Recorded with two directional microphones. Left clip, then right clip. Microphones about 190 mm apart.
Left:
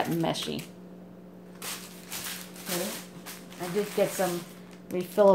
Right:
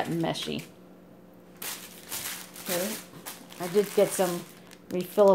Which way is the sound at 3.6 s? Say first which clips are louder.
Right 1 dB; 45° right (ahead or behind).